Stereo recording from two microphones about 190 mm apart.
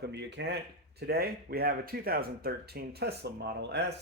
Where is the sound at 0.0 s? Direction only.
65° right (ahead or behind).